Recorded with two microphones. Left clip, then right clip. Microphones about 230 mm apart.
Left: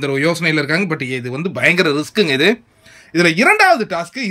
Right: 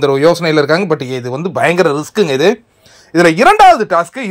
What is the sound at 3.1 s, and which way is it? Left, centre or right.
Speech, centre.